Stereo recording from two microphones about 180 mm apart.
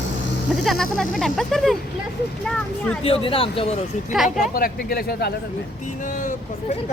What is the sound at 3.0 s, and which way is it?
Speech, 30° left (ahead or behind).